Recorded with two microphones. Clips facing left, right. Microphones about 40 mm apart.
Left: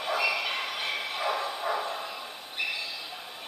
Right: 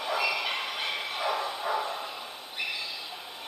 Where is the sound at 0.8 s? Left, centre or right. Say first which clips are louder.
Even; left.